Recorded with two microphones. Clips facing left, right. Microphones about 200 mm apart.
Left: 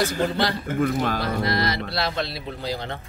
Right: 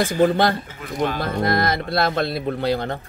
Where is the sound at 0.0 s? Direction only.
50° right (ahead or behind).